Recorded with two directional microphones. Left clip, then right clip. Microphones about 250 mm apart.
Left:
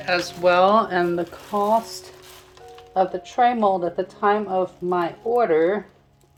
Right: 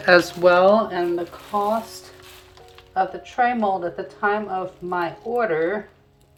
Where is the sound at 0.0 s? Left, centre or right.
Centre.